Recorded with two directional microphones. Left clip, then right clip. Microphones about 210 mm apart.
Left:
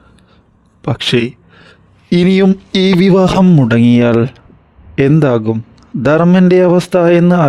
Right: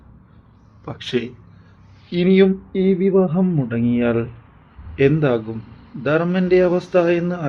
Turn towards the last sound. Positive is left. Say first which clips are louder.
# left 8 dB
turn(degrees=50)  # may be behind; listen again after turning